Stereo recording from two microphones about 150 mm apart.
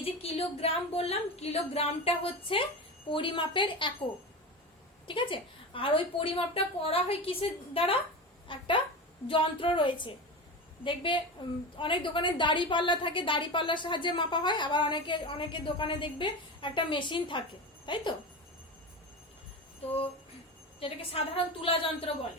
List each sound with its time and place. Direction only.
0.0 s a woman's voice: 40° left (ahead or behind)
5.0 s a woman's voice: 35° left (ahead or behind)
20.7 s a woman's voice: 40° left (ahead or behind)